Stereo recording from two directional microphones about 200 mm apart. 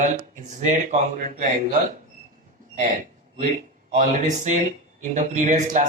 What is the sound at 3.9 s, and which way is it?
Speech, 40° right (ahead or behind).